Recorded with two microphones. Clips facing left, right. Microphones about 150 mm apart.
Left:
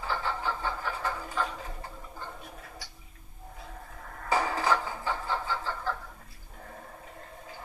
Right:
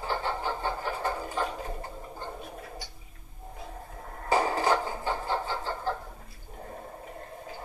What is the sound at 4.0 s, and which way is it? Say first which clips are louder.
Dishes: right 3 dB; 30° right (ahead or behind).